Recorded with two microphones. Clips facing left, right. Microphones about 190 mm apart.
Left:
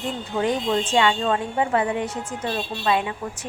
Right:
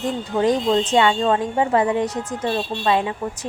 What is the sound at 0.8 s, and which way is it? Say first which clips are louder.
A woman's voice: right 3 dB; 35° right (ahead or behind).